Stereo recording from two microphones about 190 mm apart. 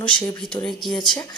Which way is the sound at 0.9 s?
25° left (ahead or behind).